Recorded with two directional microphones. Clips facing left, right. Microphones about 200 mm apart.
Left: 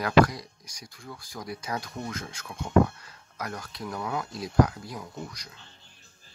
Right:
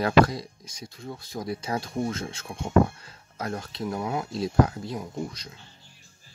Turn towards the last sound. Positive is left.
turn(degrees=-25)  # may be behind; listen again after turning